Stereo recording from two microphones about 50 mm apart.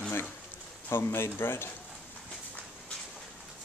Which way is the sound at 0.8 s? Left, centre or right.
Left.